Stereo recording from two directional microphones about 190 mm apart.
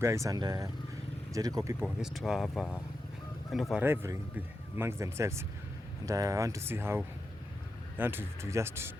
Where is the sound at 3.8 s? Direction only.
15° right (ahead or behind).